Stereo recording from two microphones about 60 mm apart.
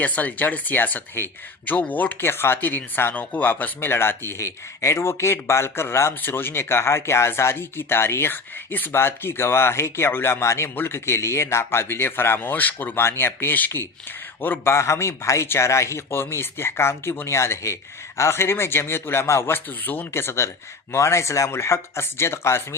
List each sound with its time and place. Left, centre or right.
0.0 s speech: left
2.2 s speech: left
13.0 s speech: left
14.7 s speech: left
20.1 s speech: left